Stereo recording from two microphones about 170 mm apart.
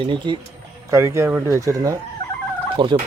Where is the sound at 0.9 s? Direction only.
15° right (ahead or behind).